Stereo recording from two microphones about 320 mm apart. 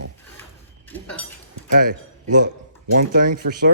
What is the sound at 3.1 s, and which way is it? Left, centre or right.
Speech, right.